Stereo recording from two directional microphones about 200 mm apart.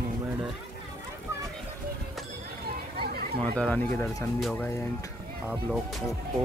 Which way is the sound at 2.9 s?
50° right (ahead or behind).